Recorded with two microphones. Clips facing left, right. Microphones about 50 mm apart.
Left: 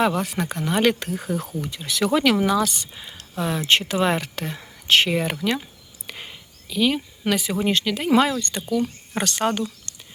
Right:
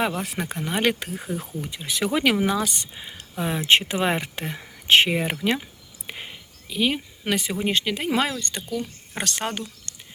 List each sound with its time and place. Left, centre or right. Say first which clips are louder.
0.0 s speech: left 4 dB; centre
6.1 s whispering: right 1 dB; centre
7.3 s speech: left 1 dB; centre
9.9 s a sound: even; centre